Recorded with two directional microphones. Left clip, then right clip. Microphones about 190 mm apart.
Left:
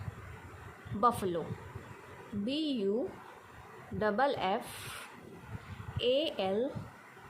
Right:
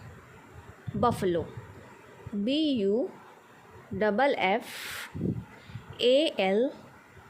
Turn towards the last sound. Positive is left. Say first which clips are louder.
# right 7 dB
turn(degrees=-30)  # may be behind; listen again after turning